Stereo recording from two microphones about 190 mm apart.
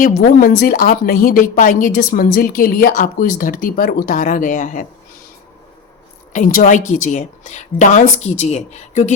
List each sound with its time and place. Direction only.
0.0 s a woman's voice: 45° left (ahead or behind)
6.3 s a woman's voice: 40° left (ahead or behind)